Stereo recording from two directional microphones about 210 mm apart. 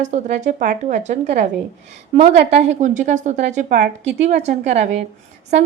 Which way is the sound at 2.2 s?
50° right (ahead or behind).